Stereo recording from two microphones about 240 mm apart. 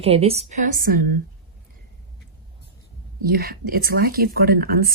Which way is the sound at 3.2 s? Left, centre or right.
Right.